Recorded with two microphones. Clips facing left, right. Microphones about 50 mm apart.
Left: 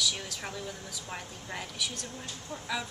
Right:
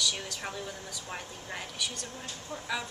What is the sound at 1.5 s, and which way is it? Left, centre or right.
Speech, centre.